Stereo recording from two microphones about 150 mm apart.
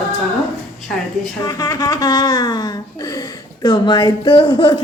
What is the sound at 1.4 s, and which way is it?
Speech, 25° left (ahead or behind).